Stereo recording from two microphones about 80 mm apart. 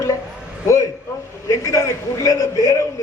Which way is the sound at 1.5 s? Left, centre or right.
Left.